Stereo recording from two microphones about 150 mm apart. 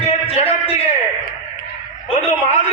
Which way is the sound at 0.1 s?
40° left (ahead or behind).